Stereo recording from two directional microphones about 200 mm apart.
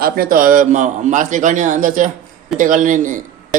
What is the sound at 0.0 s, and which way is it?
A man's voice, 50° right (ahead or behind).